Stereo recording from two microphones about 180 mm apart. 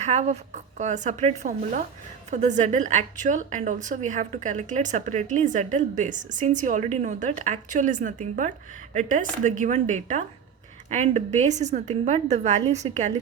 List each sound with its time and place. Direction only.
0.0 s a woman's voice: 40° right (ahead or behind)